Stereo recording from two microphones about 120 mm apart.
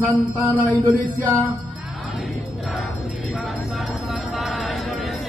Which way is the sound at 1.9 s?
Centre (ahead or behind).